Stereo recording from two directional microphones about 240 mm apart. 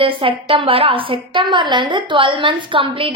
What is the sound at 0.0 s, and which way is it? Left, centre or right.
A woman's voice, right.